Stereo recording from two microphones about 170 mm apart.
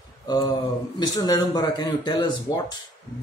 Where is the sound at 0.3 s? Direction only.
25° left (ahead or behind).